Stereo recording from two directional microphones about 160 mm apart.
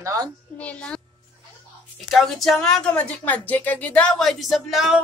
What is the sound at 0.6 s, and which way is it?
Speech, 10° left (ahead or behind).